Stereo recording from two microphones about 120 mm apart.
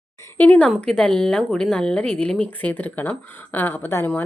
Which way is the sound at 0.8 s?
5° left (ahead or behind).